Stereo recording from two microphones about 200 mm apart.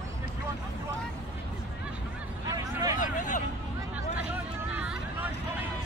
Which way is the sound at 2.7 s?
20° right (ahead or behind).